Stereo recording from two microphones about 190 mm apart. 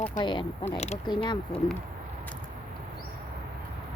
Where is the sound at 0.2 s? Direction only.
25° left (ahead or behind).